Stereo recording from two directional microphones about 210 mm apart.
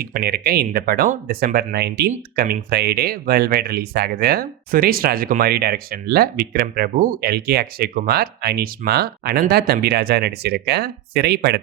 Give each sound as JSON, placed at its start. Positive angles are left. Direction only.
{"t": 0.0, "sound": "speech", "side_deg": -50}